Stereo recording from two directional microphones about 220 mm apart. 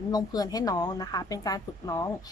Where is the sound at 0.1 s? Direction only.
15° left (ahead or behind).